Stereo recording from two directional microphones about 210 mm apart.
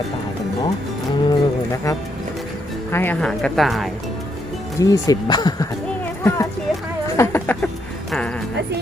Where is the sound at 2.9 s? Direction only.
10° left (ahead or behind).